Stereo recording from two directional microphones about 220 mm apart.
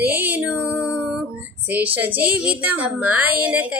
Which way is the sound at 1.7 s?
10° right (ahead or behind).